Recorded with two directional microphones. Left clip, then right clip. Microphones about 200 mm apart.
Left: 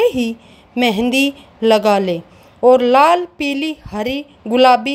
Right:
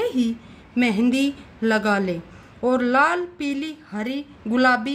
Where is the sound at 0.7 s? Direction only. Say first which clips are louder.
Left 6 dB; 30° left (ahead or behind).